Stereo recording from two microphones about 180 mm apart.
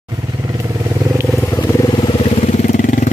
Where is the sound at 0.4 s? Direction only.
20° right (ahead or behind).